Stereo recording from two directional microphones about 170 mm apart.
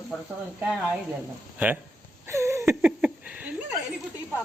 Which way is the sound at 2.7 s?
5° right (ahead or behind).